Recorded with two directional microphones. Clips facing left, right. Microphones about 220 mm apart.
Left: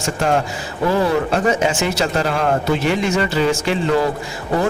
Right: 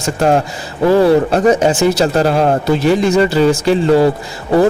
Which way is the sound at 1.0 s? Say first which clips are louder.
Right 7 dB; 40° right (ahead or behind).